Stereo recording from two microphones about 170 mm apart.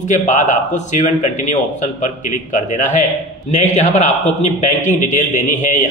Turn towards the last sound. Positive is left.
turn(degrees=45)  # may be behind; listen again after turning